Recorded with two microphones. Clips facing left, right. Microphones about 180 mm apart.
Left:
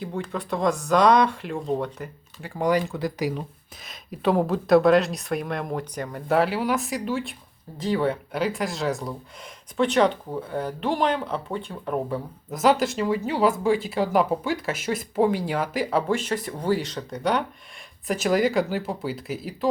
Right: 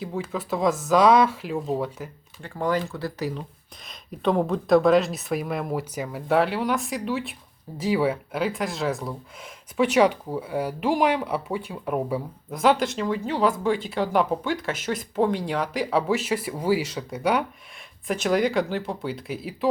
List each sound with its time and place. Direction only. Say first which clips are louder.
0.0 s speech: even; centre (ahead or behind)
2.6 s speech: left 3 dB; 15° left (ahead or behind); by 12.5 s 10° right (ahead or behind)
12.5 s speech: left 1 dB; 5° left (ahead or behind)